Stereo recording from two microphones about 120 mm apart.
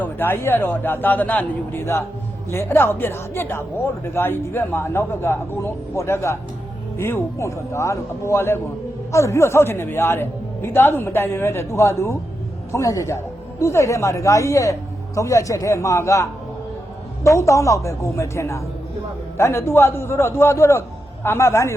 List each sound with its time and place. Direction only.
0.0 s a man's voice: 15° left (ahead or behind)